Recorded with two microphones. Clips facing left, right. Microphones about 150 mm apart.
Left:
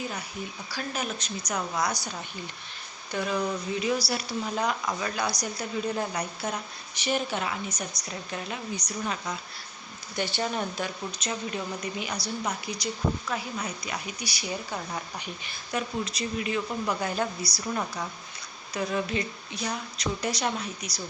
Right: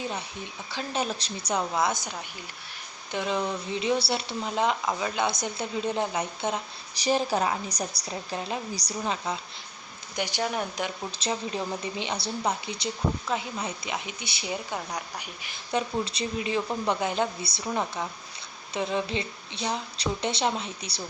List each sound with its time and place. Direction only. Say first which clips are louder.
0.0 s a woman's voice: right 1 dB; 25° right (ahead or behind)
10.2 s speech: even; 15° right (ahead or behind)
11.1 s speech: right 2 dB; 30° right (ahead or behind); by 15.5 s 15° right (ahead or behind)
15.7 s speech: right 3 dB; 30° right (ahead or behind)